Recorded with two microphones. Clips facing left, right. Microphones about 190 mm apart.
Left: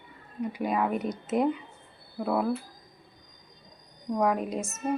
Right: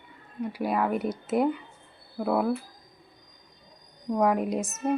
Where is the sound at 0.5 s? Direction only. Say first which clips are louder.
Right 1 dB; 5° right (ahead or behind).